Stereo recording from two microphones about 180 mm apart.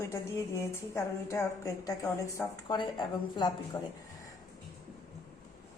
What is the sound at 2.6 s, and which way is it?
A woman's voice, 25° left (ahead or behind).